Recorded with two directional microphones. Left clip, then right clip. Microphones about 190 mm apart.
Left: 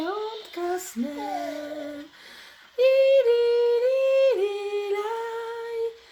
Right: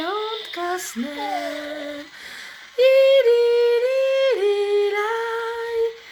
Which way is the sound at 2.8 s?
20° right (ahead or behind).